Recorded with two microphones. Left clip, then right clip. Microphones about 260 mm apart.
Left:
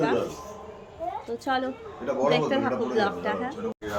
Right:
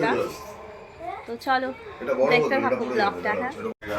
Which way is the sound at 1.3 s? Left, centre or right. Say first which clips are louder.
Right 5 dB; centre.